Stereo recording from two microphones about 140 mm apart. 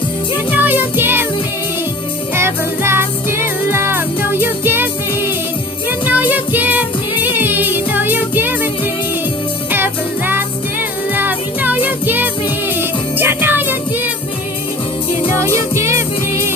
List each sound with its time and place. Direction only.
0.5 s music: 15° right (ahead or behind)
2.3 s music: 20° right (ahead or behind)
9.7 s music: 15° right (ahead or behind)
15.3 s music: 20° right (ahead or behind)